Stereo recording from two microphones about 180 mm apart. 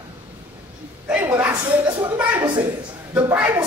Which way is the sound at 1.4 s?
20° right (ahead or behind).